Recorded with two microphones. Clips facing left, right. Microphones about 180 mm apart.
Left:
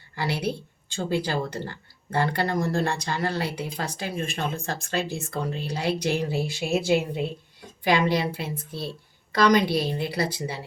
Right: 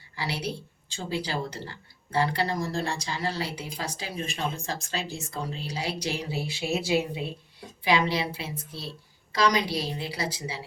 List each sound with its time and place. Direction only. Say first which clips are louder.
0.2 s a woman's voice: left 5 dB; 55° left (ahead or behind)